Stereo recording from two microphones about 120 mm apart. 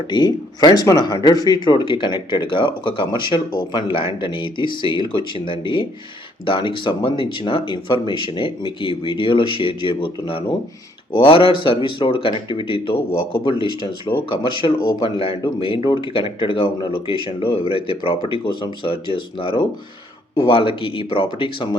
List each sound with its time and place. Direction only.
0.1 s speech: 40° left (ahead or behind)